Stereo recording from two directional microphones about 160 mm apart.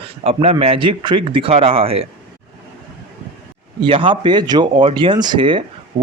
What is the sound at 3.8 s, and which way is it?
Speech, 30° right (ahead or behind).